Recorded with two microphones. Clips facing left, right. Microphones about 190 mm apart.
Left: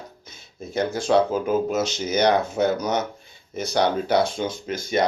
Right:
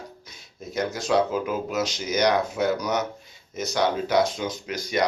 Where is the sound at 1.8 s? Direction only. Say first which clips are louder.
Left 2 dB; 25° left (ahead or behind).